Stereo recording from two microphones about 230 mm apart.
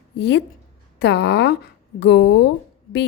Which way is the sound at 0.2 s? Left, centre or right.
Left.